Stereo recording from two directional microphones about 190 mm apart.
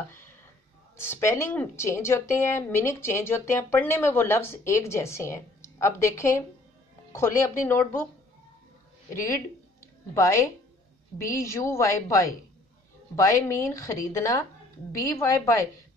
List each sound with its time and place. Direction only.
0.9 s speech: 10° left (ahead or behind)
10.1 s speech: 15° left (ahead or behind)